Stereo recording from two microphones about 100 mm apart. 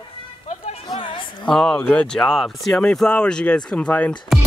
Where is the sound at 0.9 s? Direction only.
60° left (ahead or behind).